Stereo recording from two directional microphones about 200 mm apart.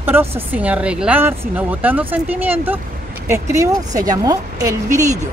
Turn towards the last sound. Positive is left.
turn(degrees=-15)  # may be behind; listen again after turning